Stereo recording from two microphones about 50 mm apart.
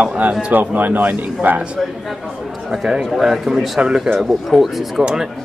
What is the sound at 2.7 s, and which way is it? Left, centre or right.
A man's voice, centre.